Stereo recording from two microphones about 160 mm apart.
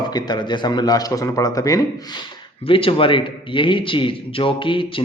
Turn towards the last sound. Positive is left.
turn(degrees=30)  # may be behind; listen again after turning